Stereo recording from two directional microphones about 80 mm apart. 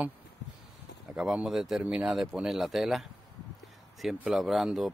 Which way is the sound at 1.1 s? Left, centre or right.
Centre.